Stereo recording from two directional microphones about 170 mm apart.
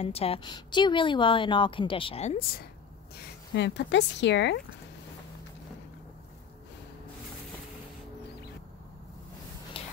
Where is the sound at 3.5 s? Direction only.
90° left.